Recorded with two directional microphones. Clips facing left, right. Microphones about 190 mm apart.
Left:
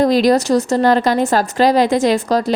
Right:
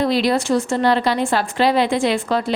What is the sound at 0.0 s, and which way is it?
Speech, 45° left (ahead or behind).